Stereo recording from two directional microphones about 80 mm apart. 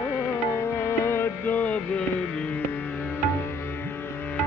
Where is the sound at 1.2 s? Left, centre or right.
Left.